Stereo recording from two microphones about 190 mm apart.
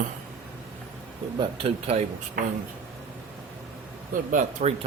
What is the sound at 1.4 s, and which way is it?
Speech, 30° right (ahead or behind).